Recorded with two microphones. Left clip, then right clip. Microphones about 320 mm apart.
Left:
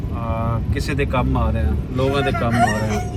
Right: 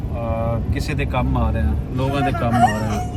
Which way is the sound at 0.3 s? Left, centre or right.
Centre.